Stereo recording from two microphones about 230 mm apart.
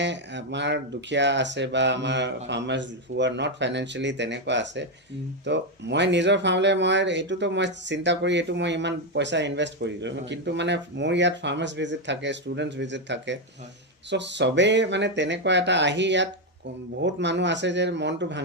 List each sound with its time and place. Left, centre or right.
0.0 s speech: right